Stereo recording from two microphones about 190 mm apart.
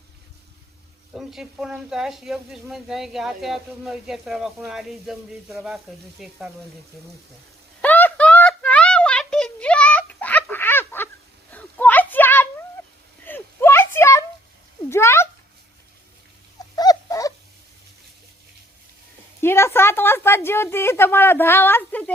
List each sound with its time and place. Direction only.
1.1 s speech: centre (ahead or behind)
7.8 s a sound: 10° left (ahead or behind)
14.8 s cat: 15° left (ahead or behind)
16.7 s dog: 20° left (ahead or behind)
19.4 s a woman's voice: 15° left (ahead or behind)